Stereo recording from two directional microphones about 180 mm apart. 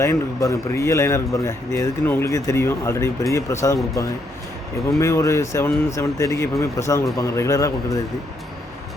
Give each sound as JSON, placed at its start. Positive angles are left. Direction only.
{"t": 0.0, "sound": "speech", "side_deg": 15}